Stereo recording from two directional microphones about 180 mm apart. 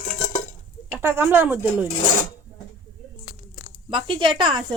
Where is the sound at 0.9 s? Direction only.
15° right (ahead or behind).